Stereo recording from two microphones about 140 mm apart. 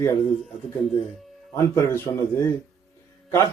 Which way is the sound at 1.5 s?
20° left (ahead or behind).